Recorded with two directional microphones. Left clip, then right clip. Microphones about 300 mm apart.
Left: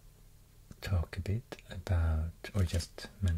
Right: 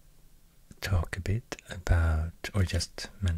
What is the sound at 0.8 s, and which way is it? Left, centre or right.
Speech, right.